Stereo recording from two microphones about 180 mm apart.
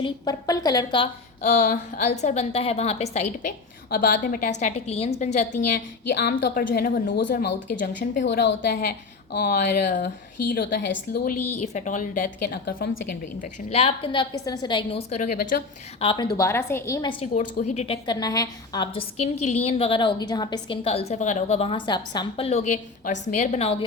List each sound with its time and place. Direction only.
0.0 s a woman's voice: 20° left (ahead or behind)
1.4 s a woman's voice: 50° left (ahead or behind)
3.8 s a woman's voice: 55° left (ahead or behind)
6.1 s a woman's voice: 65° left (ahead or behind); by 8.2 s 50° left (ahead or behind)
8.2 s a woman's voice: 85° left
10.5 s a woman's voice: 75° left (ahead or behind)
11.3 s a woman's voice: 40° left (ahead or behind); by 13.0 s 65° left (ahead or behind)
13.4 s a woman's voice: 35° left (ahead or behind)
15.4 s a woman's voice: 55° left (ahead or behind)
16.0 s a woman's voice: 25° left (ahead or behind)
19.2 s a woman's voice: 40° left (ahead or behind); by 20.7 s 20° left (ahead or behind)
20.8 s a woman's voice: 35° left (ahead or behind)